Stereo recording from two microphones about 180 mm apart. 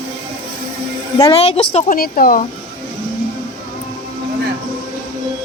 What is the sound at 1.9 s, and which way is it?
Speech, 50° left (ahead or behind).